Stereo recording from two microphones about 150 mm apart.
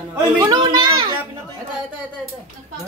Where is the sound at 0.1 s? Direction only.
20° right (ahead or behind).